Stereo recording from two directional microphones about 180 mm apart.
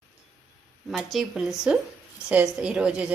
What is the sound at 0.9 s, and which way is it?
Speech, centre (ahead or behind).